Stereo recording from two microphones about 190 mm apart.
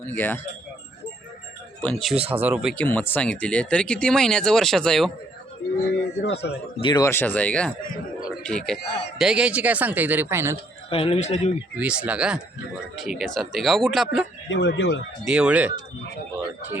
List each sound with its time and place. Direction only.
1.8 s speech: 5° left (ahead or behind)
2.1 s speech: 30° right (ahead or behind)
2.4 s speech: 5° right (ahead or behind)
2.7 s speech: 10° left (ahead or behind)
6.2 s a man's voice: 65° left (ahead or behind)
6.7 s speech: 25° left (ahead or behind)
7.0 s speech: 10° left (ahead or behind); by 10.6 s 15° right (ahead or behind)
10.8 s a man's voice: 30° left (ahead or behind)
11.8 s speech: 5° right (ahead or behind)
14.5 s speech: 65° left (ahead or behind)
15.2 s speech: 5° right (ahead or behind)